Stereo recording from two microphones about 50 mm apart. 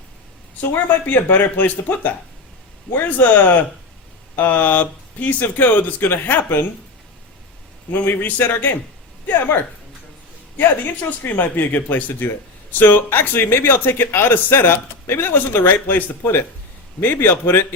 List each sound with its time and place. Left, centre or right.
1.0 s speech: left
7.9 s a man's voice: left
10.6 s a man's voice: left